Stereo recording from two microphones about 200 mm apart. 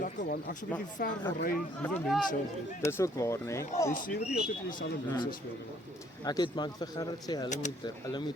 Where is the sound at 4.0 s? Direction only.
45° left (ahead or behind).